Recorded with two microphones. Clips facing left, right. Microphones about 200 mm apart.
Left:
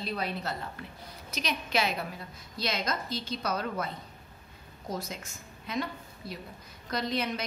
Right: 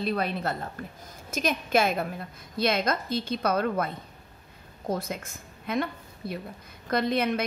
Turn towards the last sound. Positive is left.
turn(degrees=-55)  # may be behind; listen again after turning